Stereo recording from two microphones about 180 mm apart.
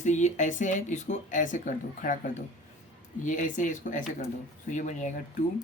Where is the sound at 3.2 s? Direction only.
45° left (ahead or behind).